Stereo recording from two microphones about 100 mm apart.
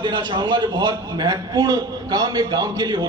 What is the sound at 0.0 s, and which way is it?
A man's voice, 50° right (ahead or behind).